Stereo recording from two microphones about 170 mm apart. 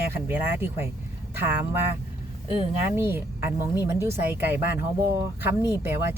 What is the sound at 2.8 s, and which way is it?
Speech, 15° right (ahead or behind).